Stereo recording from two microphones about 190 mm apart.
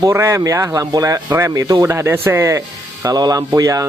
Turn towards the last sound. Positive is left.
turn(degrees=-15)  # may be behind; listen again after turning